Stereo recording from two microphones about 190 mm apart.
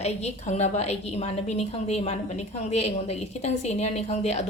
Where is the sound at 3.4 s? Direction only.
35° left (ahead or behind).